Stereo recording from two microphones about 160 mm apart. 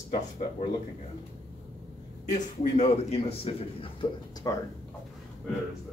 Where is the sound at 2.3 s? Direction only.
45° left (ahead or behind).